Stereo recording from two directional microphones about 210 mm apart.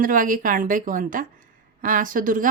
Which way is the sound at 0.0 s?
40° right (ahead or behind).